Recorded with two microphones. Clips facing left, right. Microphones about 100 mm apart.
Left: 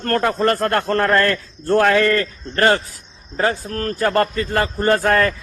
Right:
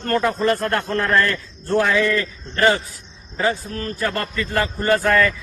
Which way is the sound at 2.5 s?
50° left (ahead or behind).